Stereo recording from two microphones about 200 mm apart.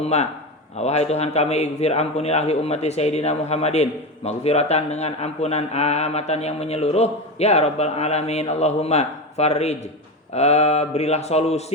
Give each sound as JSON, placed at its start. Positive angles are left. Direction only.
{"t": 0.0, "sound": "a man's voice", "side_deg": 35}